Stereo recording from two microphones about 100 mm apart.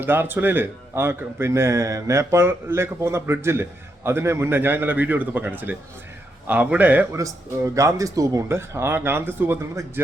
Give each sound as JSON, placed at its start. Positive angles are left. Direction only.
{"t": 0.0, "sound": "a man's voice", "side_deg": -20}
{"t": 7.1, "sound": "speech", "side_deg": -30}